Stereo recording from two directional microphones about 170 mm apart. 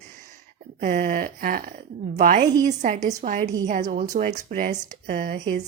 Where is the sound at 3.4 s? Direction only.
20° right (ahead or behind).